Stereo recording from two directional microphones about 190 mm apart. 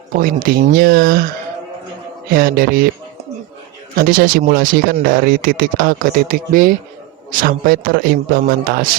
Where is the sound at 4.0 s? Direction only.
45° right (ahead or behind).